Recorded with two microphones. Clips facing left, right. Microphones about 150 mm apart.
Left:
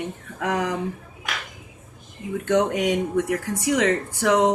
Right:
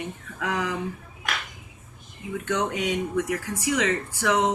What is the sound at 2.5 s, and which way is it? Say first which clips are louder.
A woman's voice: left 6 dB; 45° left (ahead or behind).